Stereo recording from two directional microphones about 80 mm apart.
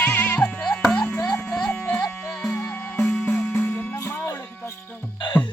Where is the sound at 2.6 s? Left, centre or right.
Left.